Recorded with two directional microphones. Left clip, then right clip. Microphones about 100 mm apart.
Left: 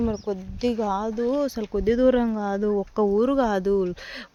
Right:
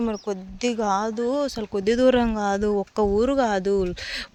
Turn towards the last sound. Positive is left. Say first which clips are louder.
# right 1 dB
turn(degrees=15)  # may be behind; listen again after turning